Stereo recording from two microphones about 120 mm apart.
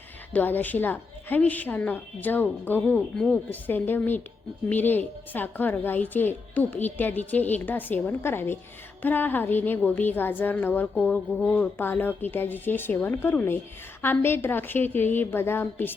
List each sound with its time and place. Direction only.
0.3 s a woman's voice: 15° left (ahead or behind)